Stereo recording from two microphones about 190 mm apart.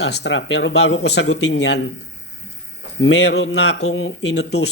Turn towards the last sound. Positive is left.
turn(degrees=60)  # may be behind; listen again after turning